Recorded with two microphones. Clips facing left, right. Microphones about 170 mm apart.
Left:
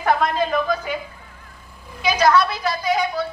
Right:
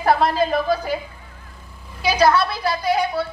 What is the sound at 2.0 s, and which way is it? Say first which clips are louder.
A woman's voice: even; 30° right (ahead or behind).